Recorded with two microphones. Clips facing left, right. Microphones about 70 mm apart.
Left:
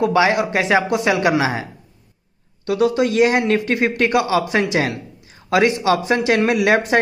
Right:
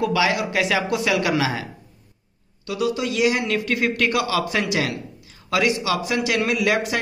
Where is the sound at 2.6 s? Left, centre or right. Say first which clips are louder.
Left 7 dB; left.